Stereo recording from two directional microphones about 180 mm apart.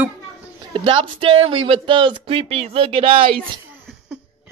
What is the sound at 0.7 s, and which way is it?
Speech, 30° right (ahead or behind).